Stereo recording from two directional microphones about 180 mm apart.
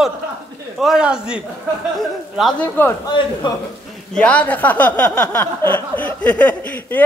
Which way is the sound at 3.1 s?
25° left (ahead or behind).